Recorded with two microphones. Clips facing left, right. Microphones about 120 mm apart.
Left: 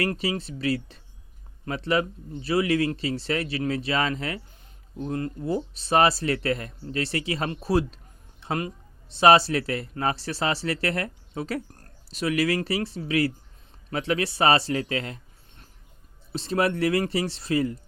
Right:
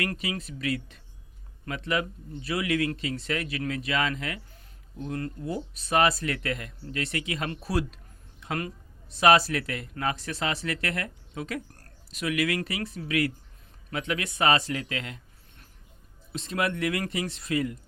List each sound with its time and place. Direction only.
0.0 s speech: 30° left (ahead or behind)